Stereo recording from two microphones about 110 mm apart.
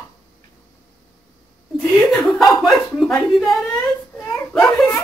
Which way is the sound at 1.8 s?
Centre (ahead or behind).